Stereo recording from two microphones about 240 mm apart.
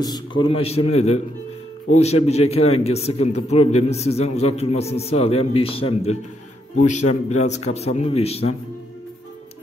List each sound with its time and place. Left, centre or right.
0.0 s a man's voice: centre